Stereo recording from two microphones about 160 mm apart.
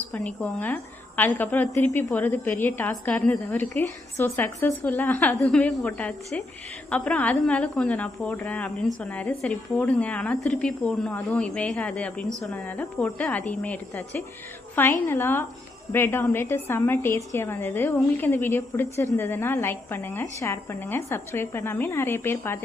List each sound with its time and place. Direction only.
0.1 s a woman's voice: 10° left (ahead or behind)